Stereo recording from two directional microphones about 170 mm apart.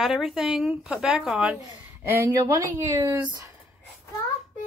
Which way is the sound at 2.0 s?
15° right (ahead or behind).